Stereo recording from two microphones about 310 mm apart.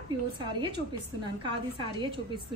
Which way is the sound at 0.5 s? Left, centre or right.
Centre.